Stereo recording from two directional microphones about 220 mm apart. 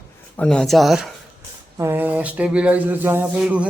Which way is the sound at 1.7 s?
10° right (ahead or behind).